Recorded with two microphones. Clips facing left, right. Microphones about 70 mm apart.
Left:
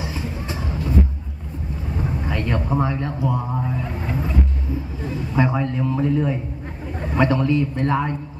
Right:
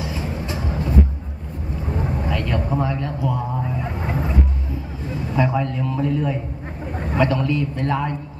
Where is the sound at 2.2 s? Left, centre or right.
Left.